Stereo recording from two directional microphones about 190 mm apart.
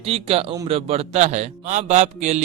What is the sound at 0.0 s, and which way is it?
A man's voice, 30° right (ahead or behind).